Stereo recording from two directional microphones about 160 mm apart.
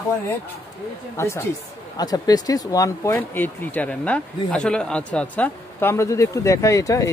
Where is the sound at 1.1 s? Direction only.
15° left (ahead or behind).